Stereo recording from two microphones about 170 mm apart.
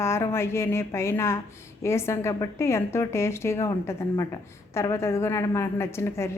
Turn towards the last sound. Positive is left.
turn(degrees=15)  # may be behind; listen again after turning